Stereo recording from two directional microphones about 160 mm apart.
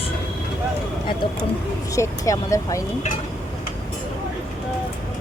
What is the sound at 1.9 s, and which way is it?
Speech, 20° left (ahead or behind).